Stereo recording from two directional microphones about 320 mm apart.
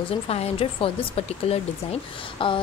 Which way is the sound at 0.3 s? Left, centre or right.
Centre.